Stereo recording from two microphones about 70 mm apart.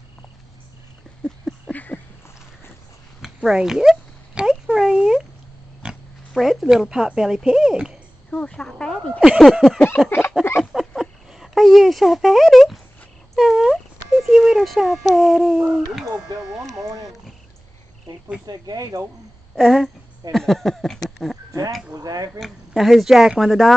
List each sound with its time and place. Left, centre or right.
1.7 s a sound: left
3.4 s a sound: centre
5.8 s pig: centre
6.3 s speech: centre
8.3 s speech: centre
9.4 s speech: centre
10.0 s a sound: left
10.6 s a sound: centre
14.2 s speech: centre
16.7 s speech: right
18.4 s speech: right
19.5 s speech: centre
21.9 s speech: right
22.4 s speech: centre